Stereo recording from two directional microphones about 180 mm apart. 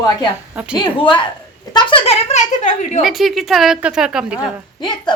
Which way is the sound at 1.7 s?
30° left (ahead or behind).